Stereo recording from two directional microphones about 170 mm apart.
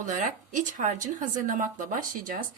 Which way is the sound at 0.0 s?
50° right (ahead or behind).